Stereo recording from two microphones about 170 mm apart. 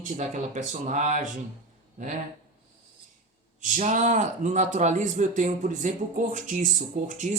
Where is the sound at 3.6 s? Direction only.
50° right (ahead or behind).